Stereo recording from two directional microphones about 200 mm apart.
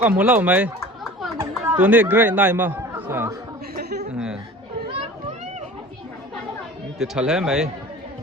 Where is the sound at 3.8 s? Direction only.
55° right (ahead or behind).